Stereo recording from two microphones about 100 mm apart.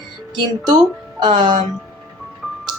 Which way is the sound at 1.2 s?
50° right (ahead or behind).